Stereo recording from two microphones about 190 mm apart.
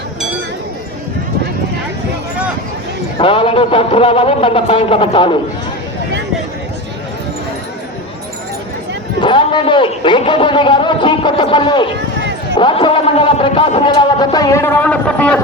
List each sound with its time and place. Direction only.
3.2 s a man's voice: 30° left (ahead or behind)
9.2 s a man's voice: 25° left (ahead or behind); by 15.4 s 5° left (ahead or behind)